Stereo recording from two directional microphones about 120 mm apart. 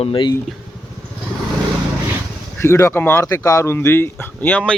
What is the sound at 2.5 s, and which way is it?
Speech, 20° left (ahead or behind).